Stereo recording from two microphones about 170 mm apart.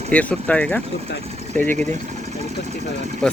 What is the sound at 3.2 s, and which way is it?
Speech, 5° left (ahead or behind).